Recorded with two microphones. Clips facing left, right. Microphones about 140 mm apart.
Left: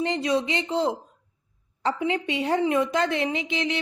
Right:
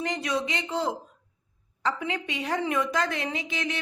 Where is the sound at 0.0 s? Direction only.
25° left (ahead or behind).